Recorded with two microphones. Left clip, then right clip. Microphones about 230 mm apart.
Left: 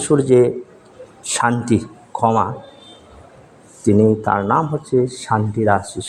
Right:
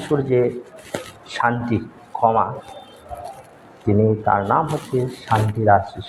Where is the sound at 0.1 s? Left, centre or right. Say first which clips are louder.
Left 5 dB; left.